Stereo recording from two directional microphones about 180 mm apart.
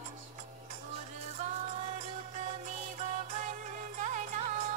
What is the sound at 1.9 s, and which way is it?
Music, 40° right (ahead or behind).